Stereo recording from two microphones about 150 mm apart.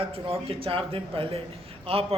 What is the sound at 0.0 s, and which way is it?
Speech, 40° right (ahead or behind).